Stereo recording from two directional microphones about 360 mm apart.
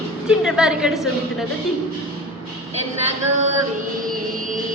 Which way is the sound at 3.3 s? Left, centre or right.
Centre.